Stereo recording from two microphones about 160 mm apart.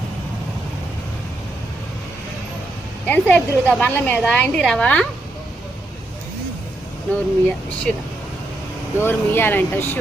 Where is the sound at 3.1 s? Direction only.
10° left (ahead or behind).